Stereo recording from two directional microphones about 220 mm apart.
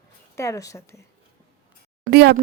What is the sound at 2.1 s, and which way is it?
Speech, 50° right (ahead or behind).